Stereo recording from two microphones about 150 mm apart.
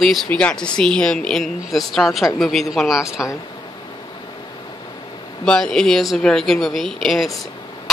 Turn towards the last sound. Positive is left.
turn(degrees=0)  # may be behind; listen again after turning